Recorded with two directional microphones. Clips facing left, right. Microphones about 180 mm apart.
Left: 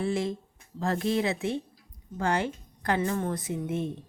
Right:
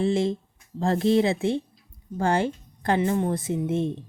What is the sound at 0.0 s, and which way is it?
A woman's voice, 25° right (ahead or behind).